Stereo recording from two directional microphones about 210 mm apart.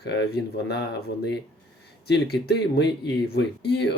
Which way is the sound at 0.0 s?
50° left (ahead or behind).